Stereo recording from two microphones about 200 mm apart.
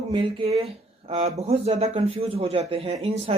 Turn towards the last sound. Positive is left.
turn(degrees=-30)  # may be behind; listen again after turning